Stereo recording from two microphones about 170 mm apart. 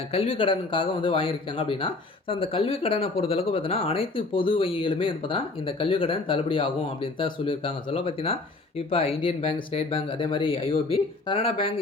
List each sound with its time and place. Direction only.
0.1 s speech: 35° left (ahead or behind)